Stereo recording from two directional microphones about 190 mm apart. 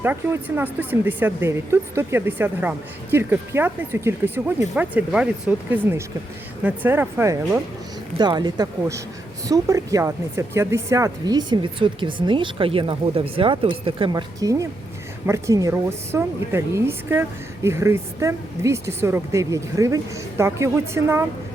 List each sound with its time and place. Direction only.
0.0 s a woman's voice: 10° right (ahead or behind)